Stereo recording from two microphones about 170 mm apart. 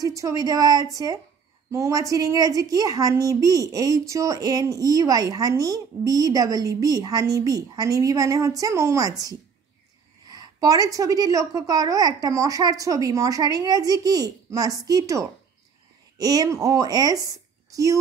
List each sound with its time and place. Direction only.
0.0 s a woman's voice: 20° right (ahead or behind)